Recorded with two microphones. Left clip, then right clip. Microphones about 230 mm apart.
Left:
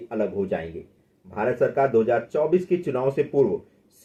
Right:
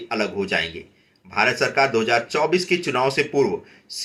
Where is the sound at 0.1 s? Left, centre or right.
Right.